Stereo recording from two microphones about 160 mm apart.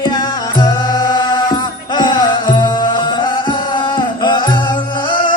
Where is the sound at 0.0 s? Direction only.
25° left (ahead or behind).